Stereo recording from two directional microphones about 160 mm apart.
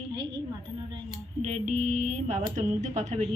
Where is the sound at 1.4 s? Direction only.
50° right (ahead or behind).